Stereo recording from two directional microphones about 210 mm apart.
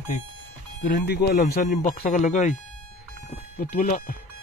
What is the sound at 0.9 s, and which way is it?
Speech, 50° left (ahead or behind).